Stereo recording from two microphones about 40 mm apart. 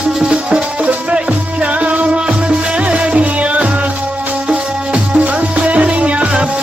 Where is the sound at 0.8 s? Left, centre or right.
Right.